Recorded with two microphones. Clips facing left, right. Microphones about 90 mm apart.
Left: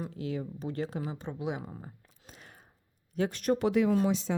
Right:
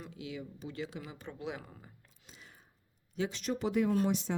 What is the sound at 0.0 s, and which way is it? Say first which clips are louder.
Speech: left 8 dB; 40° left (ahead or behind).